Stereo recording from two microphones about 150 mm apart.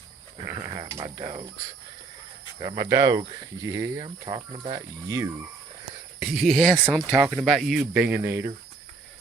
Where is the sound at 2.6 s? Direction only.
25° right (ahead or behind).